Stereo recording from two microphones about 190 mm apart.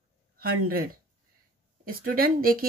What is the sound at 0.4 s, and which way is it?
Speech, 50° right (ahead or behind).